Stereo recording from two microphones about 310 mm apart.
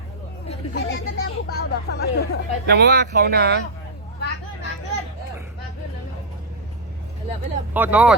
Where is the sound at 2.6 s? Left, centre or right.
Right.